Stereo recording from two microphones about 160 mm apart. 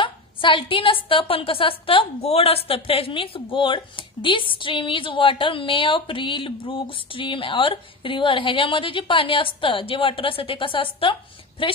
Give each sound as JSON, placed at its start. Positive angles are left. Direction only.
{"t": 0.0, "sound": "a woman's voice", "side_deg": 30}